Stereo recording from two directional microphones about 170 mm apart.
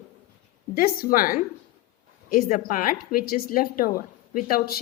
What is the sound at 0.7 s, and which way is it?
A woman's voice, 55° left (ahead or behind).